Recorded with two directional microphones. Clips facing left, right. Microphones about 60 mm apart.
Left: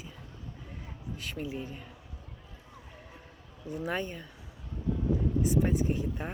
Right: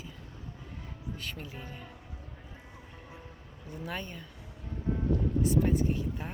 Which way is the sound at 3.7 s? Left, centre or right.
Centre.